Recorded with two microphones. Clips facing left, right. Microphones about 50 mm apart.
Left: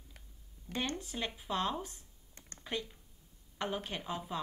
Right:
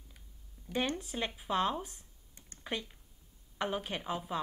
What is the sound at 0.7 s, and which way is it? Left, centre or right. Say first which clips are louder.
A woman's voice: right 3 dB; centre.